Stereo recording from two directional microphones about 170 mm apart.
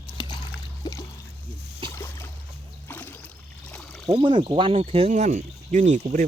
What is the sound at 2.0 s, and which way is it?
Boat, 15° left (ahead or behind).